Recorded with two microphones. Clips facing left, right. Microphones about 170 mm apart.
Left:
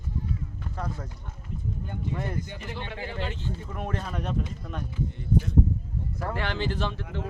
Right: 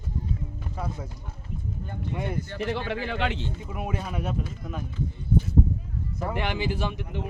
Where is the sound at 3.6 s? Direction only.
10° right (ahead or behind).